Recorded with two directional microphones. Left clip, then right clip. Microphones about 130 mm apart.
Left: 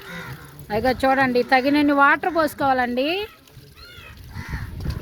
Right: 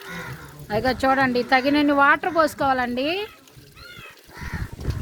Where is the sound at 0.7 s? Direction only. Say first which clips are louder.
Left 1 dB; 20° left (ahead or behind).